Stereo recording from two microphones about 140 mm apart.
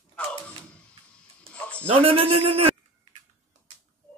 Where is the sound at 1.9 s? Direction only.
40° right (ahead or behind).